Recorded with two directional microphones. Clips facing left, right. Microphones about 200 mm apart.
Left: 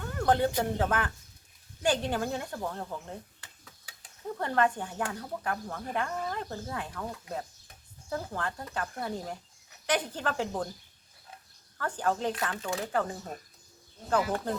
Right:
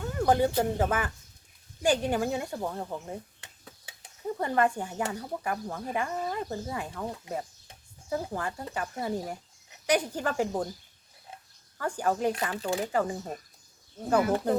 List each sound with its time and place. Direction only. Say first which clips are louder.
0.0 s speech: right 2 dB; 5° right (ahead or behind)
3.4 s a sound: right 4 dB; 25° right (ahead or behind)
4.4 s speech: right 1 dB; 10° right (ahead or behind)
11.8 s speech: right 2 dB; 10° right (ahead or behind)
12.5 s speech: right 4 dB; 30° right (ahead or behind)
12.8 s speech: right 3 dB; 10° right (ahead or behind)